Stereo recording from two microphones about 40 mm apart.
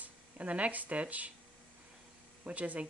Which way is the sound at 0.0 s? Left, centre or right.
Right.